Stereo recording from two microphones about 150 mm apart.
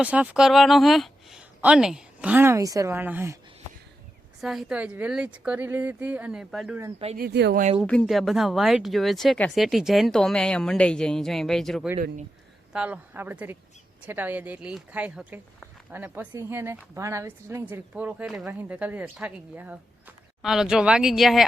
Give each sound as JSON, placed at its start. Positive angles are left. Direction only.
{"t": 0.0, "sound": "a woman's voice", "side_deg": -10}
{"t": 4.4, "sound": "a woman's voice", "side_deg": 0}
{"t": 7.2, "sound": "speech", "side_deg": -90}
{"t": 7.9, "sound": "speech", "side_deg": 5}
{"t": 12.7, "sound": "a woman's voice", "side_deg": -10}